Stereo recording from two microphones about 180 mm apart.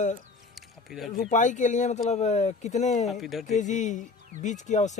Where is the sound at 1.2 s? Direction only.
45° left (ahead or behind).